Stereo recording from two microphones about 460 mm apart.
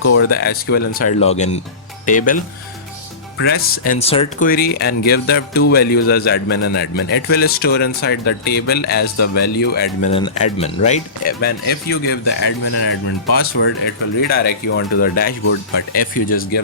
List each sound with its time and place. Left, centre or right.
0.0 s speech: left
0.3 s a man's voice: centre
3.4 s a man's voice: centre
12.2 s a man's voice: left
14.2 s a man's voice: centre